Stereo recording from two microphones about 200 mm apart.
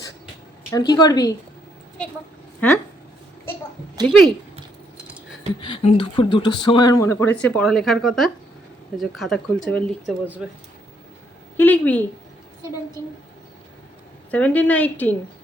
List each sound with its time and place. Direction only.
0.7 s speech: 20° left (ahead or behind)
2.6 s a woman's voice: 10° left (ahead or behind)
4.0 s a woman's voice: 5° left (ahead or behind)
5.5 s speech: 25° left (ahead or behind); by 10.6 s 5° right (ahead or behind)
11.5 s a woman's voice: 10° left (ahead or behind)
14.3 s a woman's voice: 5° left (ahead or behind)